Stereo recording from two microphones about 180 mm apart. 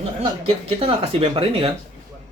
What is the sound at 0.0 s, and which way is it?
Speech, 30° right (ahead or behind).